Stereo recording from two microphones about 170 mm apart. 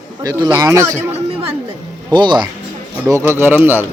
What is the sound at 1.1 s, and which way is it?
Speech, 35° right (ahead or behind).